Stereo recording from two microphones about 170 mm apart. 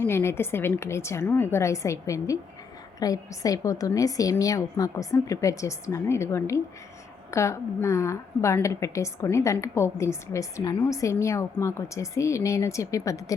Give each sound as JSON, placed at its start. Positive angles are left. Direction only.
{"t": 0.0, "sound": "a woman's voice", "side_deg": 15}